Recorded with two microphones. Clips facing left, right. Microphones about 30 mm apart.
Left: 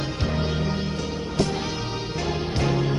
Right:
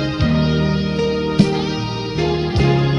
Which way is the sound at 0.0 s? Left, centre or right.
Right.